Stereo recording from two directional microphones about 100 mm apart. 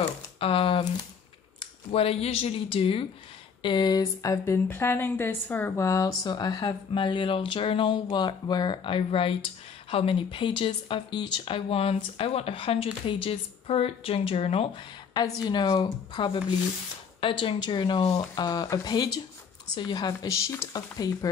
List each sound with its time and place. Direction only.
0.0 s a sound: 70° left (ahead or behind)
1.9 s speech: 80° left; by 3.1 s 65° left (ahead or behind)
3.6 s speech: 45° left (ahead or behind)
4.5 s speech: 20° left (ahead or behind)
5.9 s speech: 35° left (ahead or behind); by 14.7 s 80° left
15.1 s speech: 45° left (ahead or behind)
18.1 s speech: 45° left (ahead or behind)